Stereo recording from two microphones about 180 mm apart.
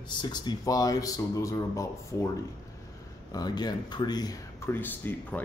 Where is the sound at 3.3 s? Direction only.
20° left (ahead or behind).